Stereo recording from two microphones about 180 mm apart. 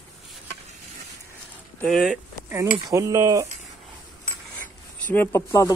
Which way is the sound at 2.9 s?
15° right (ahead or behind).